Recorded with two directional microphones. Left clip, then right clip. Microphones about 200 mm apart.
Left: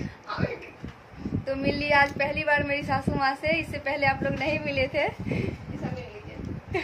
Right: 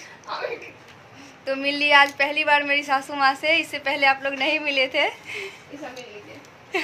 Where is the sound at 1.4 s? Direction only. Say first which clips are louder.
Right 6 dB; 5° right (ahead or behind).